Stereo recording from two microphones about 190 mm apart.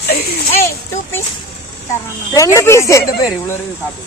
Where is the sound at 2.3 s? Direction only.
15° left (ahead or behind).